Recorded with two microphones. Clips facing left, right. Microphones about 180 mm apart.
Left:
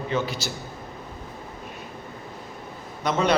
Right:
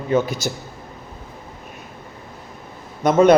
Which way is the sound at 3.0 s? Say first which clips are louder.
Right 10 dB; 50° right (ahead or behind).